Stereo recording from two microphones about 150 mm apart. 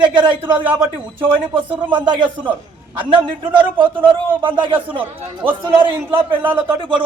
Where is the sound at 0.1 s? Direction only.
30° right (ahead or behind).